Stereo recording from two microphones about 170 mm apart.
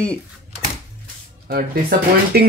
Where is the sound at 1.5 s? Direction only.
60° right (ahead or behind).